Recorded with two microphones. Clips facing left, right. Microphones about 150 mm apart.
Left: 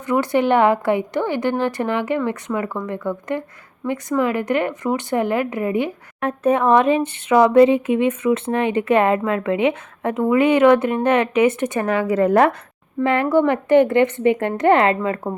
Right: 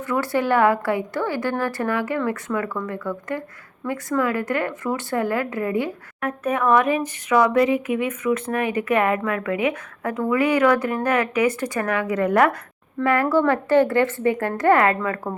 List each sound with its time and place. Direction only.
0.0 s speech: 20° left (ahead or behind)